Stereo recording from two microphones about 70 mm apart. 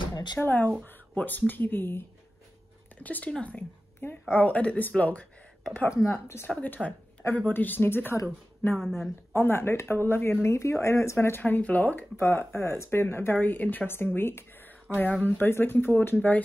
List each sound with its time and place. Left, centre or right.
0.1 s a sound: left
0.4 s a woman's voice: left
4.0 s speech: left
6.0 s speech: left
8.7 s speech: centre
9.3 s speech: left
10.4 s speech: left